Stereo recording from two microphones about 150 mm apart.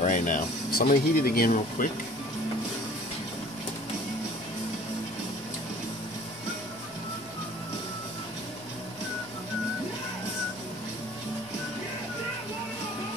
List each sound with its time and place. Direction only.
0.0 s speech: 55° left (ahead or behind); by 1.9 s 70° left (ahead or behind)